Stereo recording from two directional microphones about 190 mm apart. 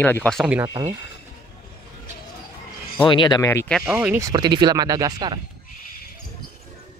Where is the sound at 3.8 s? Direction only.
10° right (ahead or behind).